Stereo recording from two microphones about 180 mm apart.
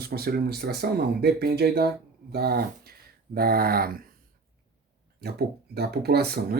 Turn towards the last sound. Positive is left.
turn(degrees=-60)  # may be behind; listen again after turning